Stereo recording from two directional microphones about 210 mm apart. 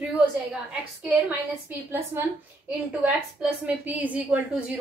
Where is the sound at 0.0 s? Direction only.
5° right (ahead or behind).